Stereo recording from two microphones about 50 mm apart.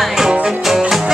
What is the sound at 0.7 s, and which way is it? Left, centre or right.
Music, centre.